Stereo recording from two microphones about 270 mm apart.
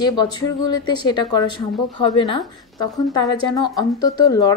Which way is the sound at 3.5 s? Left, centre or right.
Centre.